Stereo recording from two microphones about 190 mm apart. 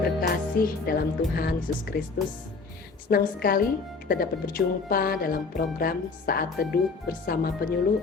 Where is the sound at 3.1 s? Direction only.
50° left (ahead or behind).